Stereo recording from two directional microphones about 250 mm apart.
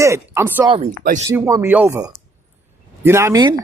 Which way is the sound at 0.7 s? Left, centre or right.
Right.